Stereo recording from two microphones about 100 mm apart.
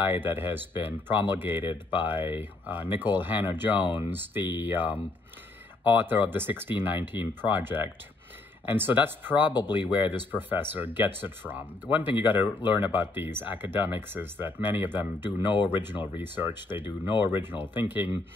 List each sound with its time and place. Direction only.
0.0 s speech: 20° right (ahead or behind)
1.6 s speech: 50° left (ahead or behind)
2.0 s speech: 20° right (ahead or behind)
9.5 s speech: 45° left (ahead or behind)
9.8 s speech: 20° right (ahead or behind)
16.8 s speech: 50° left (ahead or behind)
17.7 s speech: 20° right (ahead or behind)